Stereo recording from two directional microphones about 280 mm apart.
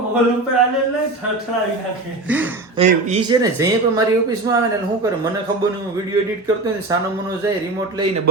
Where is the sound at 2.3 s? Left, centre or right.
Centre.